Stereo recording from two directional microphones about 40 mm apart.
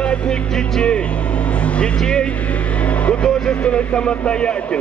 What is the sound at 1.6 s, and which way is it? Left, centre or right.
Vehicle, left.